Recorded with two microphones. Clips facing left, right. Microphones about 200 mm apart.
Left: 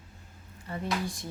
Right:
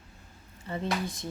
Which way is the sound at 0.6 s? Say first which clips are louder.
Right 1 dB; 25° right (ahead or behind).